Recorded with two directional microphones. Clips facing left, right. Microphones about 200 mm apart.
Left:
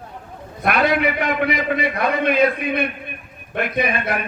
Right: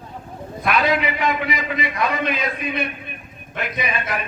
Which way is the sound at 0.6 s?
50° left (ahead or behind).